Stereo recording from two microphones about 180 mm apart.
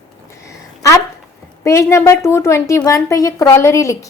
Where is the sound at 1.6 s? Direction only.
15° left (ahead or behind).